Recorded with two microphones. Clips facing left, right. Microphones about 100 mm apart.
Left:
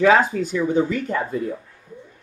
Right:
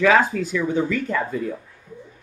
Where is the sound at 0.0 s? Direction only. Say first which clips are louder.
Left 1 dB; 35° left (ahead or behind).